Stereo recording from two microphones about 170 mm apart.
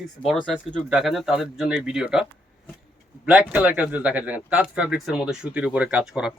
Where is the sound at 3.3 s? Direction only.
5° right (ahead or behind).